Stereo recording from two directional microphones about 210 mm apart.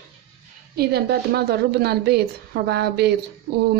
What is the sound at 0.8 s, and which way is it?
A woman's voice, 50° right (ahead or behind).